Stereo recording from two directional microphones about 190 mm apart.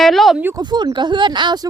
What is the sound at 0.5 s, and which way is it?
Speech, 20° right (ahead or behind).